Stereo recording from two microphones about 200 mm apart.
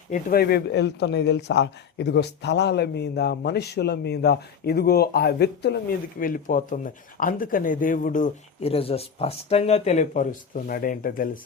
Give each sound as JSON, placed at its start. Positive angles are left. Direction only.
{"t": 0.1, "sound": "speech", "side_deg": 50}